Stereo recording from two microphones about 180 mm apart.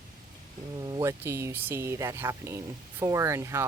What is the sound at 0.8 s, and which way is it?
Speech, 20° right (ahead or behind).